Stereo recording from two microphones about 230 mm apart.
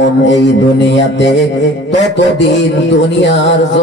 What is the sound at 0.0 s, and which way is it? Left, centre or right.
Mantra, left.